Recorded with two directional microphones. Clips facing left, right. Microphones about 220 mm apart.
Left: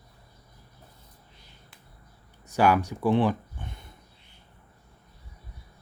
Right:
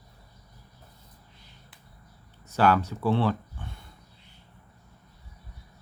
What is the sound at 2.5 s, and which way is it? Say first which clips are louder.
Speech: left 1 dB; 15° left (ahead or behind).